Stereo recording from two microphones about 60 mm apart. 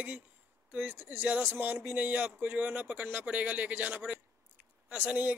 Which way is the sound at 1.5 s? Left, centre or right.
Right.